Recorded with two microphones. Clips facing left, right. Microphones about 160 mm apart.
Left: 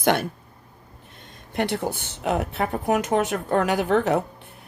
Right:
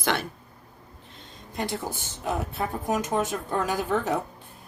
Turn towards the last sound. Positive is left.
turn(degrees=70)  # may be behind; listen again after turning